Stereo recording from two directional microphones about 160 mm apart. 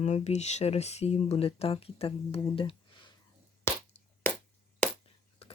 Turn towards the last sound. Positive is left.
turn(degrees=40)  # may be behind; listen again after turning